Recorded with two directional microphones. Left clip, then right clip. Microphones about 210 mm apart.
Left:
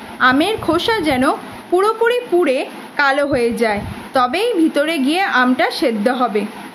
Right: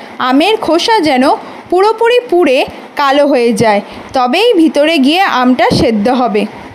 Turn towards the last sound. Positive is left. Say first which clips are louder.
# right 6 dB
turn(degrees=-35)  # may be behind; listen again after turning